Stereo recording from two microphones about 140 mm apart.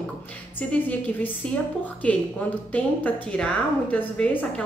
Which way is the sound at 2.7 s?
10° left (ahead or behind).